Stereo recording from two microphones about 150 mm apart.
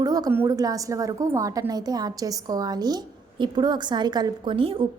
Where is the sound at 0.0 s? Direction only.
25° right (ahead or behind).